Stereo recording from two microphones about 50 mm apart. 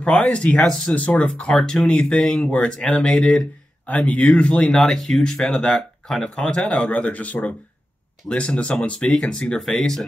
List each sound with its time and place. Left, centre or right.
0.0 s speech: left
0.9 s speech: left
3.8 s speech: left; by 10.0 s centre